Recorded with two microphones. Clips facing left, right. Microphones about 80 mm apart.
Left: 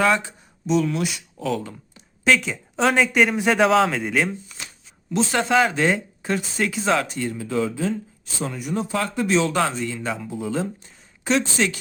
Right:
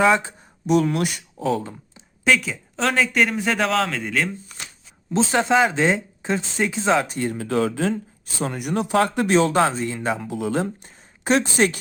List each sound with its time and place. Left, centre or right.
0.7 s speech: right
1.4 s speech: right
2.2 s speech: centre
4.4 s shuffling cards: right
5.3 s speech: centre
7.1 s speech: right
7.3 s speech: right
10.2 s speech: right
10.5 s speech: right